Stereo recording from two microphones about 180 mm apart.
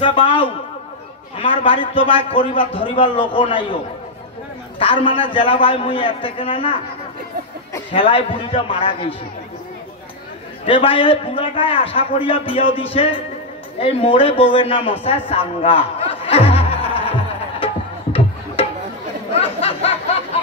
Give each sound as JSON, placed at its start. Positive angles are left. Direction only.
{"t": 0.0, "sound": "a man's voice", "side_deg": 30}
{"t": 4.7, "sound": "a man's voice", "side_deg": 30}
{"t": 7.9, "sound": "a man's voice", "side_deg": 30}
{"t": 10.6, "sound": "a man's voice", "side_deg": 30}
{"t": 19.3, "sound": "a sound", "side_deg": 35}